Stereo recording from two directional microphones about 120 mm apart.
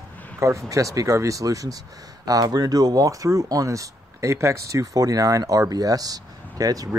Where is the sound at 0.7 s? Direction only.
25° right (ahead or behind).